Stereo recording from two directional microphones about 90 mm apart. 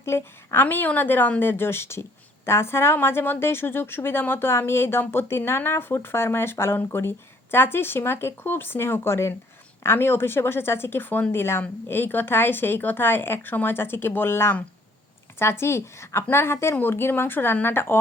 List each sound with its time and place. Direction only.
0.0 s a woman's voice: 25° left (ahead or behind)